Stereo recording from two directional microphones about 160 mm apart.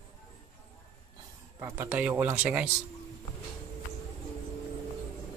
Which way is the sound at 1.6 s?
15° right (ahead or behind).